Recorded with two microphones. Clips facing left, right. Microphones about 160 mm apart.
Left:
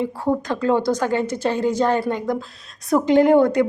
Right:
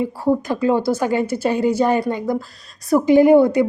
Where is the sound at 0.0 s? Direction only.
5° right (ahead or behind).